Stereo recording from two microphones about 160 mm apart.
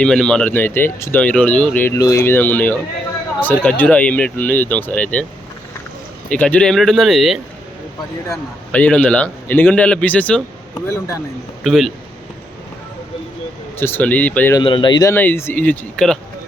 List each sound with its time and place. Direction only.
0.0 s speech: 5° left (ahead or behind)
6.3 s speech: 10° left (ahead or behind)
11.6 s speech: centre (ahead or behind)
13.7 s speech: 15° left (ahead or behind)
14.5 s speech: 30° left (ahead or behind)
15.1 s speech: 15° left (ahead or behind)